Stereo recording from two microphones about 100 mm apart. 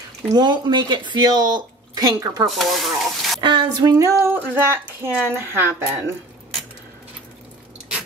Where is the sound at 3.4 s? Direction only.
50° right (ahead or behind).